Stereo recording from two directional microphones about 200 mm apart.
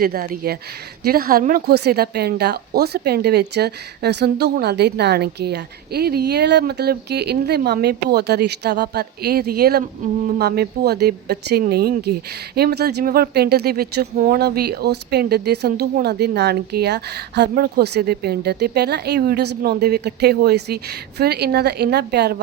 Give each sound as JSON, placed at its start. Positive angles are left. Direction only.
{"t": 0.0, "sound": "a woman's voice", "side_deg": -50}